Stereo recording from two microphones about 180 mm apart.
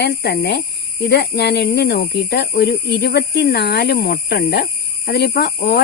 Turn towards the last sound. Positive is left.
turn(degrees=60)  # may be behind; listen again after turning